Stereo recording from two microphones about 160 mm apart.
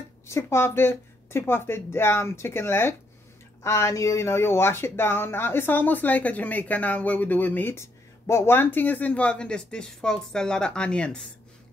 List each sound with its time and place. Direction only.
0.3 s speech: 15° left (ahead or behind)